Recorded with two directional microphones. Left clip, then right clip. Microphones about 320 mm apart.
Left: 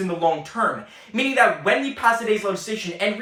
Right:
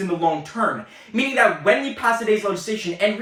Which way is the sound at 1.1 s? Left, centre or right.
Centre.